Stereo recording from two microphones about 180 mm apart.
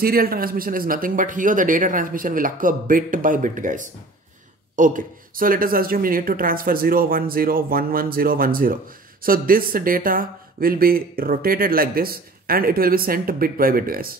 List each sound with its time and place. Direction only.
0.0 s speech: 55° right (ahead or behind)